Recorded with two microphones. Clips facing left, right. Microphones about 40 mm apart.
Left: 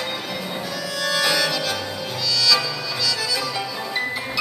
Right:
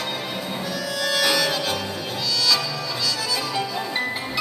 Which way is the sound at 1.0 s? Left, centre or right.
Centre.